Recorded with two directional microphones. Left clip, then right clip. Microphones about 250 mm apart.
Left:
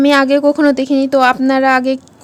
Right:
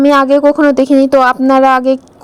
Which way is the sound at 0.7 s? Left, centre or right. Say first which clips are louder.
Right 5 dB; centre.